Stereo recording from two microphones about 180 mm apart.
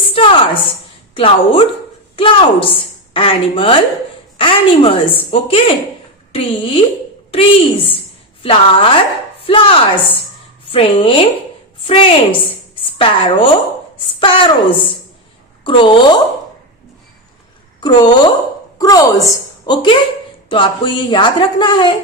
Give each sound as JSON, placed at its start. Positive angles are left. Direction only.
{"t": 0.1, "sound": "a woman's voice", "side_deg": 30}
{"t": 17.7, "sound": "a woman's voice", "side_deg": 25}